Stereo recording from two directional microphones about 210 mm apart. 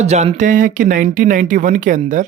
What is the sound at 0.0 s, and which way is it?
Speech, 30° right (ahead or behind).